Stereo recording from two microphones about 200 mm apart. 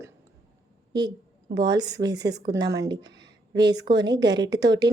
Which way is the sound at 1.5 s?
20° right (ahead or behind).